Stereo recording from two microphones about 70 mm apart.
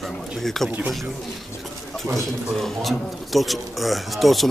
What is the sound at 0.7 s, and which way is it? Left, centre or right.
Speech, centre.